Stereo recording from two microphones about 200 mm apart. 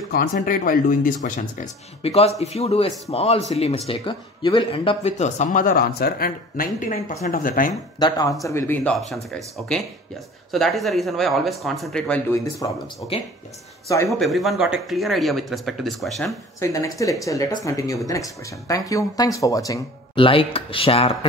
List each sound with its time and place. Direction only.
0.1 s speech: 45° left (ahead or behind)
2.0 s speech: 30° left (ahead or behind)
7.7 s speech: 20° left (ahead or behind)
12.6 s speech: 20° left (ahead or behind)
14.0 s speech: centre (ahead or behind)
16.5 s speech: 15° left (ahead or behind)